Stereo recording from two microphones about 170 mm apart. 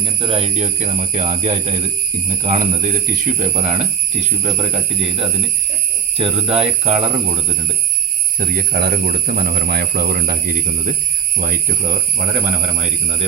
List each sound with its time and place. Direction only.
0.0 s speech: 30° right (ahead or behind)
8.4 s speech: 60° right (ahead or behind); by 13.2 s 40° right (ahead or behind)